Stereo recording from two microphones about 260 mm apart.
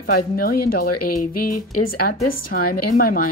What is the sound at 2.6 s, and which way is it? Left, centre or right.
Speech, left.